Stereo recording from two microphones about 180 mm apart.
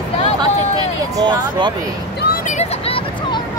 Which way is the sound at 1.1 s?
25° right (ahead or behind).